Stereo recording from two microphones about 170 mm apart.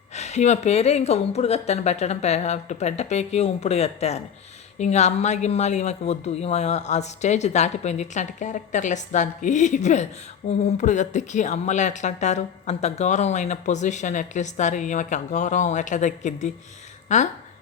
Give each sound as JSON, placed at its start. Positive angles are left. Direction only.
{"t": 0.1, "sound": "speech", "side_deg": 40}